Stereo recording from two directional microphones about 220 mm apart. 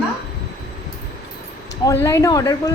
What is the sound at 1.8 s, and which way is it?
Speech, 15° left (ahead or behind).